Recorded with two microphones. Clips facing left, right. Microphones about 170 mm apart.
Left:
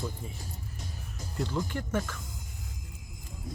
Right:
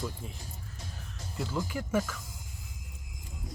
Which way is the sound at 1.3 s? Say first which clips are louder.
Left 1 dB; 5° right (ahead or behind).